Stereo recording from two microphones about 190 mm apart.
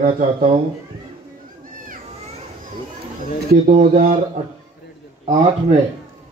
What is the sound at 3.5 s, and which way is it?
Speech, 45° right (ahead or behind).